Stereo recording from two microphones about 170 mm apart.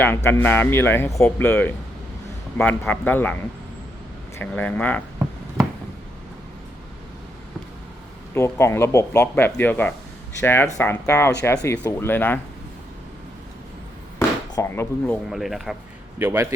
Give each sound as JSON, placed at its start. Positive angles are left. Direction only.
{"t": 0.0, "sound": "speech", "side_deg": 10}
{"t": 4.4, "sound": "speech", "side_deg": 10}
{"t": 8.3, "sound": "speech", "side_deg": 15}
{"t": 14.2, "sound": "speech", "side_deg": 15}
{"t": 15.3, "sound": "speech", "side_deg": 0}
{"t": 16.1, "sound": "speech", "side_deg": -15}